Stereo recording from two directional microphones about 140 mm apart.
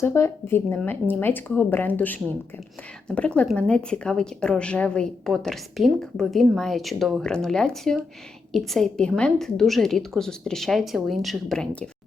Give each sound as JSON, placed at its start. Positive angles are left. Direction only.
{"t": 0.0, "sound": "a woman's voice", "side_deg": 20}